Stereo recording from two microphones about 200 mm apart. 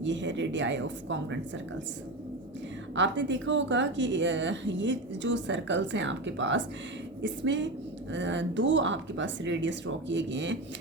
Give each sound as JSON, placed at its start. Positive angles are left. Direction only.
{"t": 0.0, "sound": "speech", "side_deg": -65}
{"t": 2.9, "sound": "speech", "side_deg": -65}